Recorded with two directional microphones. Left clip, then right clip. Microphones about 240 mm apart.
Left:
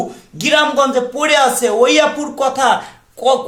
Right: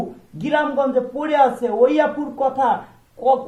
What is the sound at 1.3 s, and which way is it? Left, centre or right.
Speech, centre.